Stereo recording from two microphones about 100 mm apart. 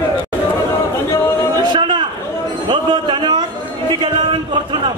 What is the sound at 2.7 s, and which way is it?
Music, 55° right (ahead or behind).